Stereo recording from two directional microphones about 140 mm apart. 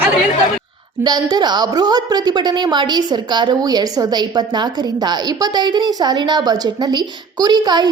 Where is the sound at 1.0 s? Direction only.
30° right (ahead or behind).